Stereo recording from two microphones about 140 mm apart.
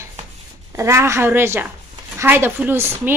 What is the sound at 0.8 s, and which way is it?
A woman's voice, 20° right (ahead or behind).